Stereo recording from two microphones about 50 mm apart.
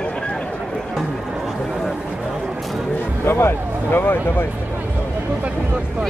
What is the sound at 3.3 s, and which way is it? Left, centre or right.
Speech, left.